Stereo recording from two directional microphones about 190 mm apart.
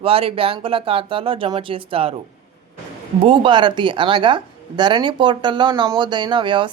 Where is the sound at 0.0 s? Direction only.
30° right (ahead or behind).